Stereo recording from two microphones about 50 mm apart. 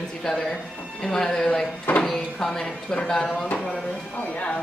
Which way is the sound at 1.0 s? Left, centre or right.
Centre.